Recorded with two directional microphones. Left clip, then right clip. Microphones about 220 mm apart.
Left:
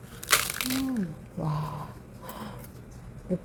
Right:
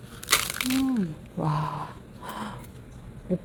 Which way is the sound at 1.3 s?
30° right (ahead or behind).